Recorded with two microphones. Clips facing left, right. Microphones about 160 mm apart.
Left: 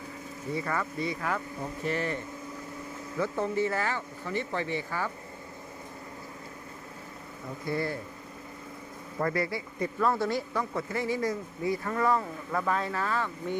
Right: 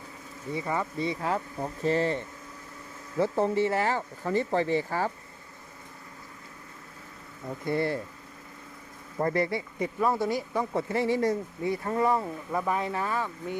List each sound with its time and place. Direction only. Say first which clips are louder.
0.5 s speech: right 2 dB; 20° right (ahead or behind); by 5.1 s 35° right (ahead or behind)
7.7 s speech: right 3 dB; 25° right (ahead or behind)
9.1 s speech: right 3 dB; 20° right (ahead or behind)